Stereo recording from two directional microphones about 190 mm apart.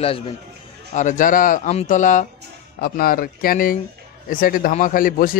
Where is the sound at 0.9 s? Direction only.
40° left (ahead or behind).